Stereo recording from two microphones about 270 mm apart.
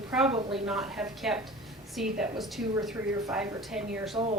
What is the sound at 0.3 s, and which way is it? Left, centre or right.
Speech, centre.